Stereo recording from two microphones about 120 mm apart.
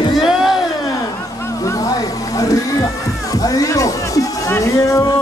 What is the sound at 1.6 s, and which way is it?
Music, 30° left (ahead or behind).